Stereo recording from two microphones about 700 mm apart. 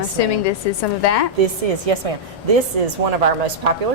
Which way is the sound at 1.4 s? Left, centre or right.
Right.